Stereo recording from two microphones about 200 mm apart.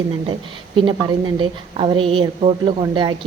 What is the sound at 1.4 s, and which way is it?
A woman's voice, 25° right (ahead or behind).